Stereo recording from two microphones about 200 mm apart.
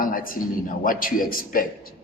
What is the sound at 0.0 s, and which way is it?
A man's voice, 45° left (ahead or behind).